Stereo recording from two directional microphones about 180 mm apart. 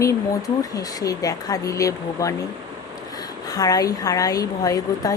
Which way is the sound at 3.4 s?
20° left (ahead or behind).